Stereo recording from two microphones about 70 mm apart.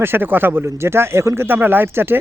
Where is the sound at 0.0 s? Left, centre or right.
Right.